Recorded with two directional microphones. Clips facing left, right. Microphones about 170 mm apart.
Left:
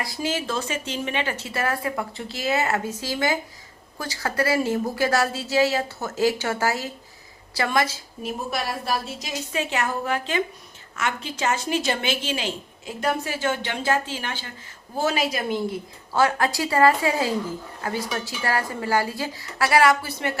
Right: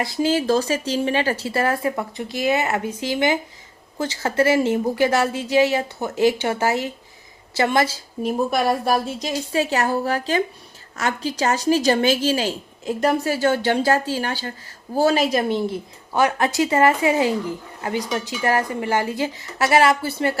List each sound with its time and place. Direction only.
0.0 s a woman's voice: 25° right (ahead or behind)
8.5 s a woman's voice: 50° right (ahead or behind)
9.2 s speech: 35° right (ahead or behind)
16.1 s a woman's voice: 20° right (ahead or behind)